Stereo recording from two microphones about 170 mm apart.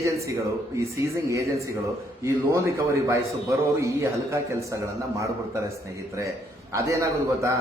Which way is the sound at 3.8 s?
15° right (ahead or behind).